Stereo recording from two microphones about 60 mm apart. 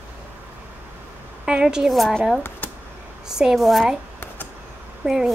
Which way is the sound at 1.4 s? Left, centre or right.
Centre.